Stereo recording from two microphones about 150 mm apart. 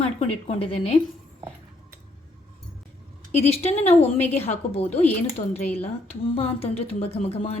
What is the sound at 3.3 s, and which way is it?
A woman's voice, 45° left (ahead or behind).